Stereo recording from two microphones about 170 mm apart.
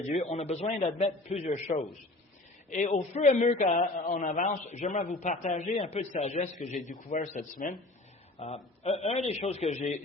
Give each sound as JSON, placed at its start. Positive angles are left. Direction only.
{"t": 0.1, "sound": "a man's voice", "side_deg": 40}
{"t": 8.4, "sound": "a man's voice", "side_deg": 40}